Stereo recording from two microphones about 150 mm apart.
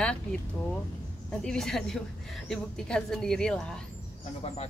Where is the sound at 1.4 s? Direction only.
5° left (ahead or behind).